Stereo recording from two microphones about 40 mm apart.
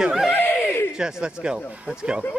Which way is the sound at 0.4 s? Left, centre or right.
Left.